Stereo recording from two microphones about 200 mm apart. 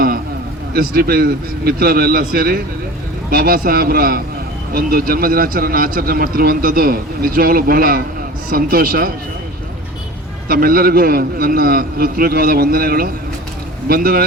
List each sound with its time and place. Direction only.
0.7 s a man's voice: 50° right (ahead or behind)
10.5 s a man's voice: 45° right (ahead or behind)